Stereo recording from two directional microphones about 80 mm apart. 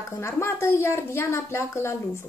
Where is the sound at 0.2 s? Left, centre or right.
Left.